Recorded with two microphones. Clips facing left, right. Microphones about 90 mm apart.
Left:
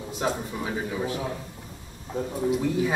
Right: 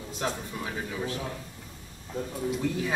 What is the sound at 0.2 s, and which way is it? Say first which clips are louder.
A man's voice: left 4 dB; 15° left (ahead or behind).